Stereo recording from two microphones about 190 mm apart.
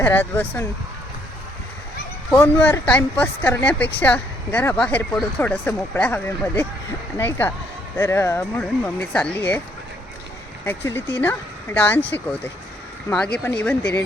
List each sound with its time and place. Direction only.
0.0 s a woman's voice: 10° left (ahead or behind)
2.3 s a woman's voice: 15° left (ahead or behind)
10.7 s a woman's voice: 10° left (ahead or behind)
13.1 s a woman's voice: 5° left (ahead or behind)